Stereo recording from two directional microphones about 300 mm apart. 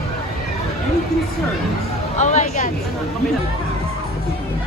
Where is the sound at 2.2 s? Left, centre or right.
Left.